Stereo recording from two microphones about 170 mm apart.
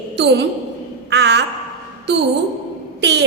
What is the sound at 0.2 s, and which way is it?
Speech, 80° right.